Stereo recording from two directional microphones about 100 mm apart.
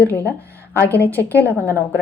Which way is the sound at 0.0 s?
20° left (ahead or behind).